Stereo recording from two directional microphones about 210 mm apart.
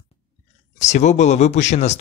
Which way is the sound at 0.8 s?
35° left (ahead or behind).